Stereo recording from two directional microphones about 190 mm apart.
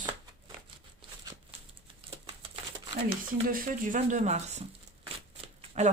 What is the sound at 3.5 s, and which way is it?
A woman's voice, 45° right (ahead or behind).